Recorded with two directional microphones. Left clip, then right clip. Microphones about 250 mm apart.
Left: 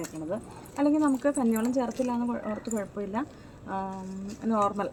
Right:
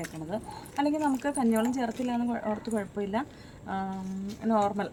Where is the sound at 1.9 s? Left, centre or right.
Centre.